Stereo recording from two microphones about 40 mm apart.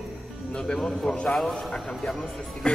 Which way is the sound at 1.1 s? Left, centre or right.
Left.